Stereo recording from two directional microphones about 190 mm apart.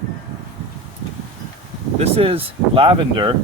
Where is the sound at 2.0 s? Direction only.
30° right (ahead or behind).